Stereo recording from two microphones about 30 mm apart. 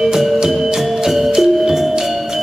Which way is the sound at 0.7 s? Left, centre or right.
Centre.